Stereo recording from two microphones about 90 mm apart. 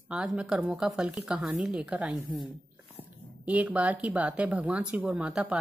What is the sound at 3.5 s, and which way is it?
Speech, 15° right (ahead or behind).